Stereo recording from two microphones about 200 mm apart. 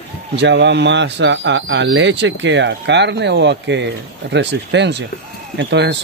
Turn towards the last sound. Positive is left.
turn(degrees=-60)  # may be behind; listen again after turning